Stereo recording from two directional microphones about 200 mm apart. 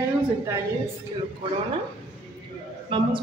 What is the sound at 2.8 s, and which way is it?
Speech, 25° right (ahead or behind).